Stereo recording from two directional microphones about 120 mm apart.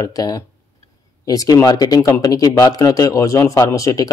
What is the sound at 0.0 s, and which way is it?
Speech, 30° left (ahead or behind).